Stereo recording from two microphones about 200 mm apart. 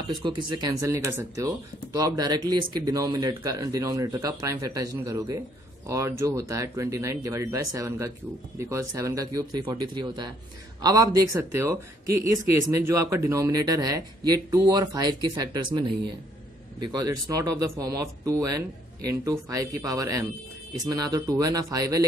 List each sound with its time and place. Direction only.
0.2 s speech: 25° right (ahead or behind)
12.7 s speech: 15° right (ahead or behind)
16.8 s speech: 20° right (ahead or behind)